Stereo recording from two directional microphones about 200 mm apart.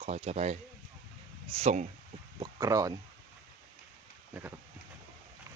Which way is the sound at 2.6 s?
15° right (ahead or behind).